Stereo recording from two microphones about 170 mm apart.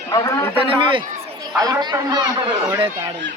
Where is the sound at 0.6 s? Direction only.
30° right (ahead or behind).